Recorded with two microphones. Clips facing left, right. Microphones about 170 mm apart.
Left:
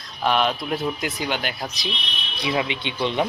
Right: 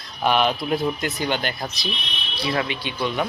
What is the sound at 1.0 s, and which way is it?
Speech, 10° left (ahead or behind).